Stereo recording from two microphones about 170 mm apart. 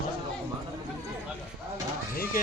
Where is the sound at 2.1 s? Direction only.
60° left (ahead or behind).